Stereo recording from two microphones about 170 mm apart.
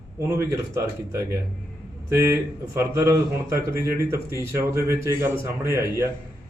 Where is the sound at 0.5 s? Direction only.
15° right (ahead or behind).